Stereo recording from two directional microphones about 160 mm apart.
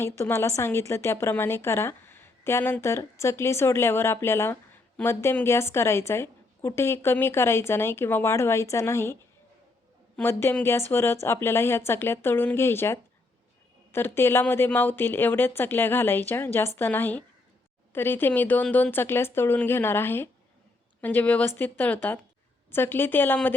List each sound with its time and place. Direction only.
0.0 s a woman's voice: 15° left (ahead or behind)
10.2 s a woman's voice: 15° left (ahead or behind)